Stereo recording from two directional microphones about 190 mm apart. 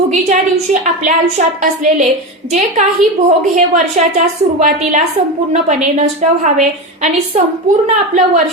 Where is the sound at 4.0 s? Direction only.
40° right (ahead or behind).